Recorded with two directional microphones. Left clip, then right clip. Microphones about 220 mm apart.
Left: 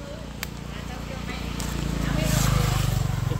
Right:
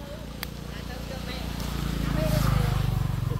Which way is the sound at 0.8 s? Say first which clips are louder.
Left 1 dB; 25° right (ahead or behind).